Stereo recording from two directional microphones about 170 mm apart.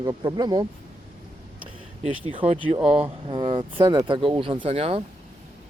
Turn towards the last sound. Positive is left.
turn(degrees=-35)  # may be behind; listen again after turning